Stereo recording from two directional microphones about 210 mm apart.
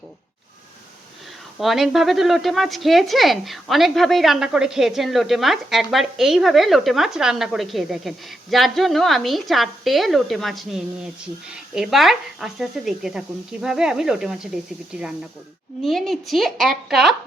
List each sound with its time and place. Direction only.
1.5 s speech: centre (ahead or behind)